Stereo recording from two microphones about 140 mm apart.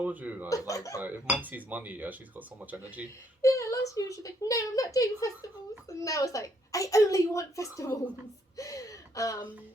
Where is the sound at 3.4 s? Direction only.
20° left (ahead or behind).